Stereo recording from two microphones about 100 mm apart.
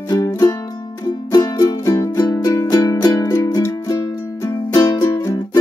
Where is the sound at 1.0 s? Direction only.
45° left (ahead or behind).